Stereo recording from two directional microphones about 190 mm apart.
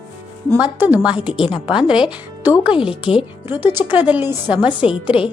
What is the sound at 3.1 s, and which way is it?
Speech, 30° left (ahead or behind).